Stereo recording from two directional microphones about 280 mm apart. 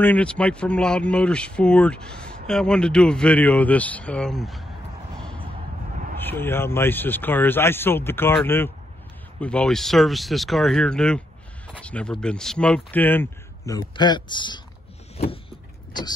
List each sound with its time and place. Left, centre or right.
0.0 s speech: centre
6.1 s speech: centre